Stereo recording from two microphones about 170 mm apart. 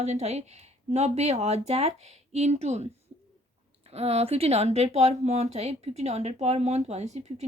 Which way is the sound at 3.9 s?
35° right (ahead or behind).